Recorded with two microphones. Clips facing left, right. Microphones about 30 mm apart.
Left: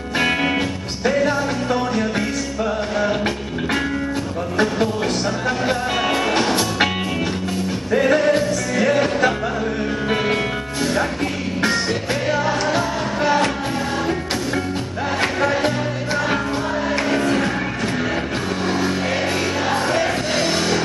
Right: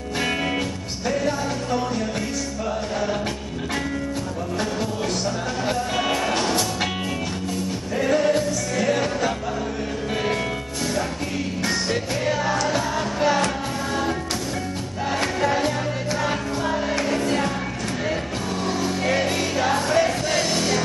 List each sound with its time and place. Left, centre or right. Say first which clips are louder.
1.0 s music: left 5 dB; left
5.7 s music: left 1 dB; left
7.9 s music: left 4 dB; left
12.3 s music: left 3 dB; left
16.9 s music: left 4 dB; left
19.0 s music: left 1 dB; centre